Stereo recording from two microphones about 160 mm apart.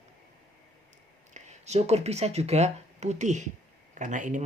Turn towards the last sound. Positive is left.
turn(degrees=-50)  # may be behind; listen again after turning